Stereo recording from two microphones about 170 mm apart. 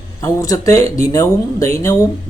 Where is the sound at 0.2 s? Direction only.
20° left (ahead or behind).